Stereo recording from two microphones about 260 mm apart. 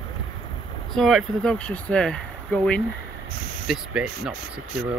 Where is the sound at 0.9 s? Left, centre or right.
Centre.